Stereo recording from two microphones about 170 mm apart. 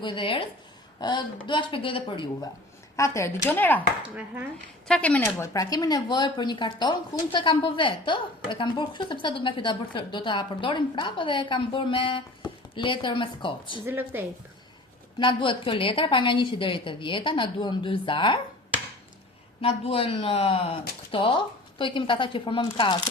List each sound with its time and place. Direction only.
0.0 s a woman's voice: 30° left (ahead or behind)
2.9 s speech: 15° left (ahead or behind)
4.1 s speech: 10° right (ahead or behind)
4.9 s a woman's voice: 5° left (ahead or behind); by 13.8 s 30° left (ahead or behind)
13.8 s speech: 10° right (ahead or behind)
15.2 s a woman's voice: 30° left (ahead or behind)
19.6 s a woman's voice: 35° left (ahead or behind)